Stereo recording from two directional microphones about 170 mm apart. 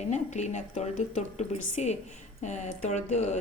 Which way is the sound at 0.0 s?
45° left (ahead or behind).